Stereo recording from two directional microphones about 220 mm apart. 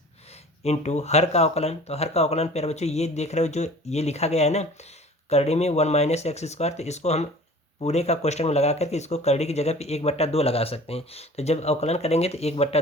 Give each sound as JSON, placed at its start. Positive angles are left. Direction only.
{"t": 0.6, "sound": "speech", "side_deg": 30}